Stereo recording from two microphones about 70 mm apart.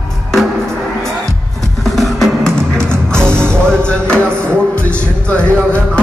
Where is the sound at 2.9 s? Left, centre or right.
Right.